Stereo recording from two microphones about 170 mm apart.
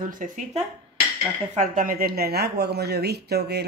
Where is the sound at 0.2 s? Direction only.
45° right (ahead or behind).